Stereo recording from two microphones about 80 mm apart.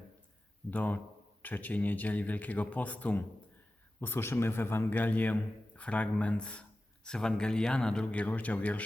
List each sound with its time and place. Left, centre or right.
0.7 s speech: left